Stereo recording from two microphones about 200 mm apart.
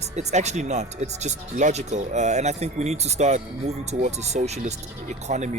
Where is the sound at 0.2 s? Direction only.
35° right (ahead or behind).